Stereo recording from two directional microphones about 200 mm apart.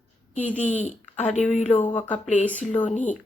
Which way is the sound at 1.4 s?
35° left (ahead or behind).